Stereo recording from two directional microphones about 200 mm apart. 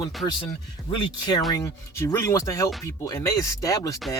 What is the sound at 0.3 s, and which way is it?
Speech, 25° left (ahead or behind).